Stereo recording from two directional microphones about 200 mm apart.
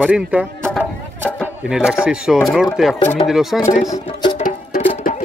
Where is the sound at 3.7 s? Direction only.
35° left (ahead or behind).